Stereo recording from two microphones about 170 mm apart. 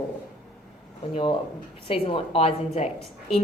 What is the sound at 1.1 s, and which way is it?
A woman's voice, 30° left (ahead or behind).